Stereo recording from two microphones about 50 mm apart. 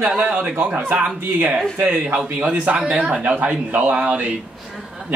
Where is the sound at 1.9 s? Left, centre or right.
Right.